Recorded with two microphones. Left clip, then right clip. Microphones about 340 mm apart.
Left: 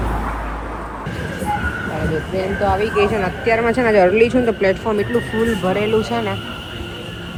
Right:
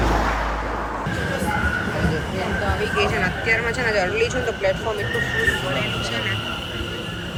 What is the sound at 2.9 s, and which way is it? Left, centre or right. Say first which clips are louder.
Speech: left 3 dB; centre.